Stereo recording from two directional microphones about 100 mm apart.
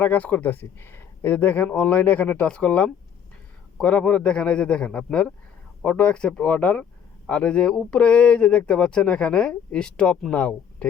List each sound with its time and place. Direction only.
0.0 s speech: 15° left (ahead or behind)